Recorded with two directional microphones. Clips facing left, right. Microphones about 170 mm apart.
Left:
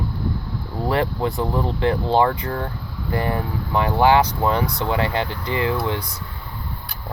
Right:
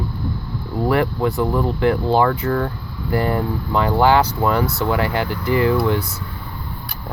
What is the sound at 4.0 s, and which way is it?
Speech, 15° left (ahead or behind).